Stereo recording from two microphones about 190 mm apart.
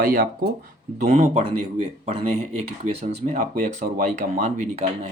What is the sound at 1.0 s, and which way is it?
Speech, 40° right (ahead or behind).